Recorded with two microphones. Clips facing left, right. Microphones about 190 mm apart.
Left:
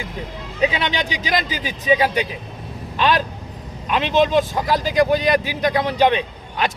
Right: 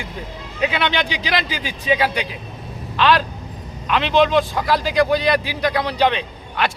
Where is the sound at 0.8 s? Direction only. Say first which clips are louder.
Right 2 dB; 40° left (ahead or behind).